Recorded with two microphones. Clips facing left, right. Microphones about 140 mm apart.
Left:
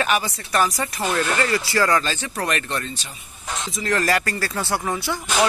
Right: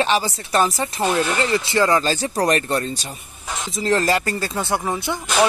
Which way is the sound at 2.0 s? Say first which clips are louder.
Right 6 dB; 35° right (ahead or behind).